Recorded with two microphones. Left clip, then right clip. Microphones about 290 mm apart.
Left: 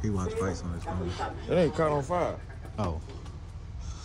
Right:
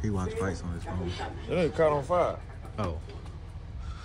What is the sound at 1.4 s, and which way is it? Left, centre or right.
Speech, left.